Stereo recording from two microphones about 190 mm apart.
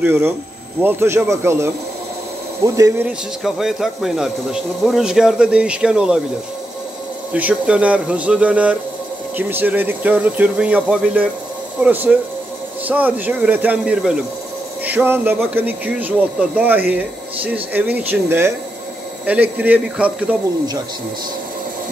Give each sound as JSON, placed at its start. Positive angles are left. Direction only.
{"t": 0.0, "sound": "speech", "side_deg": -10}
{"t": 3.1, "sound": "speech", "side_deg": 0}
{"t": 7.3, "sound": "speech", "side_deg": -5}